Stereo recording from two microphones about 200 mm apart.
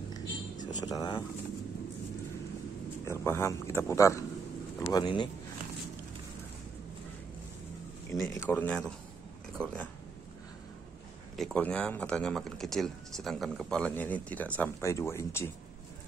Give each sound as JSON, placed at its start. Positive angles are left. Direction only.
{"t": 0.7, "sound": "speech", "side_deg": 20}
{"t": 3.1, "sound": "speech", "side_deg": 10}
{"t": 8.1, "sound": "speech", "side_deg": 15}
{"t": 11.3, "sound": "speech", "side_deg": 5}